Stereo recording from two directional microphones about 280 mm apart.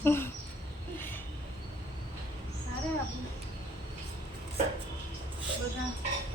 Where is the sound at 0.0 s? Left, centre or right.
Centre.